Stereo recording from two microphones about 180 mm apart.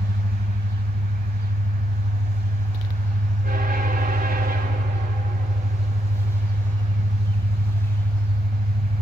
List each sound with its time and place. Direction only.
3.4 s train: 50° right (ahead or behind)